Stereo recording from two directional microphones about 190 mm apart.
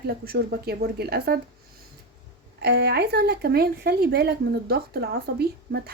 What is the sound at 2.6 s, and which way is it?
A woman's voice, 60° right (ahead or behind).